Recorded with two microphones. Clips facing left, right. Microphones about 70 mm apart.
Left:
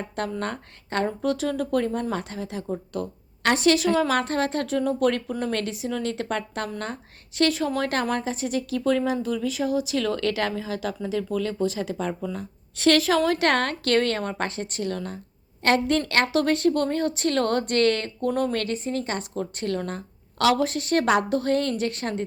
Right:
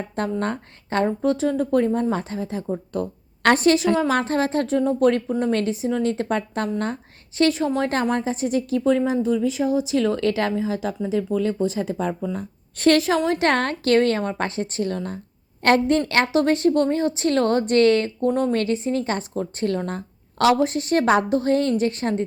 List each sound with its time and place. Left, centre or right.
0.2 s a woman's voice: right
3.8 s a woman's voice: right
13.0 s speech: right